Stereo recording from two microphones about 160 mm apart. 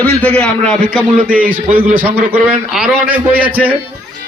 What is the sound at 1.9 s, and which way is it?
A man's voice, 10° right (ahead or behind).